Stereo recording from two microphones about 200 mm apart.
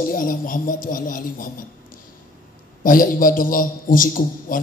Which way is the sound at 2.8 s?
45° left (ahead or behind).